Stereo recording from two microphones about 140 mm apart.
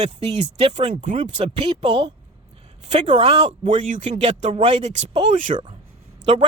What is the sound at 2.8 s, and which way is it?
Speech, 55° right (ahead or behind).